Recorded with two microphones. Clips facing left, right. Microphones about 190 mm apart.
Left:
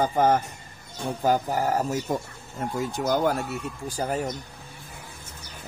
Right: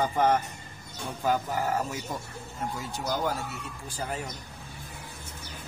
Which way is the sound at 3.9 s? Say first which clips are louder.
Left 7 dB; 40° left (ahead or behind).